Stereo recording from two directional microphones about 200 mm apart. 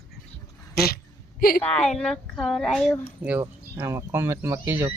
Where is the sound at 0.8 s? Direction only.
50° left (ahead or behind).